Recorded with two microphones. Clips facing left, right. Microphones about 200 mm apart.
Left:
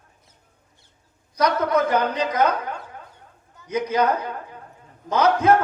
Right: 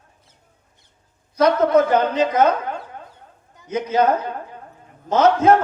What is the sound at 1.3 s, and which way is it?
A woman's voice, 25° right (ahead or behind).